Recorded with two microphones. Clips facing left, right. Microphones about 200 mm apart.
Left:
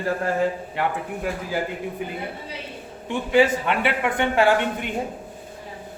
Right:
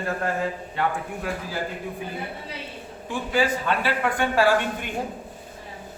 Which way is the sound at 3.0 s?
25° left (ahead or behind).